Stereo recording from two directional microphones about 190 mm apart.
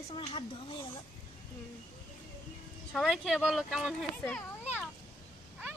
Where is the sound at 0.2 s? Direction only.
30° left (ahead or behind).